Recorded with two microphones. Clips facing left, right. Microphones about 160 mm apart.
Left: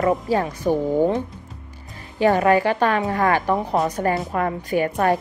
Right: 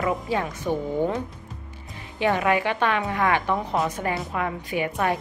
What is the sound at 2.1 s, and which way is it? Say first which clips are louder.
A woman's voice: left 5 dB; 40° left (ahead or behind).